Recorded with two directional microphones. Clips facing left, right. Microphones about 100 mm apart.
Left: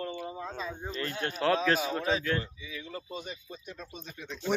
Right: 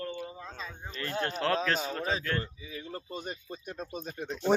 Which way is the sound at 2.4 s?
45° right (ahead or behind).